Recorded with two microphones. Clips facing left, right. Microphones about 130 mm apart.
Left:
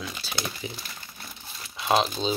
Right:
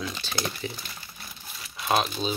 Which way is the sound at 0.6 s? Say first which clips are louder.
Right 1 dB; 15° left (ahead or behind).